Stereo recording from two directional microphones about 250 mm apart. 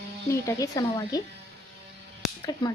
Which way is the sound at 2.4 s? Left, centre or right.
Centre.